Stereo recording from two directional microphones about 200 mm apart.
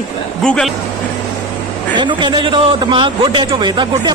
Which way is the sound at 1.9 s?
25° right (ahead or behind).